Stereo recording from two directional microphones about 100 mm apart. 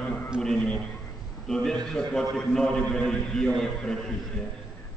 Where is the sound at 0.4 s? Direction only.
5° left (ahead or behind).